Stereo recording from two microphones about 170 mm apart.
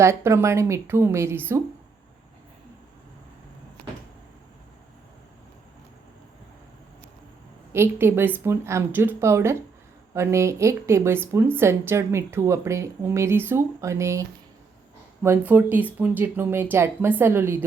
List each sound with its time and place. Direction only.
0.0 s a woman's voice: 15° right (ahead or behind)
7.7 s a woman's voice: 15° right (ahead or behind)